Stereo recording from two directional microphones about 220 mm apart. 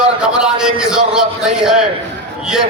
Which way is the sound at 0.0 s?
5° right (ahead or behind).